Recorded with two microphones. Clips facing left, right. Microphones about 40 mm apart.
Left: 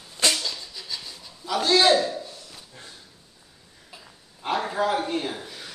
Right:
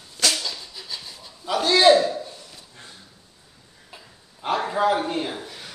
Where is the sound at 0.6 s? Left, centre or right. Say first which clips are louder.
Even; centre.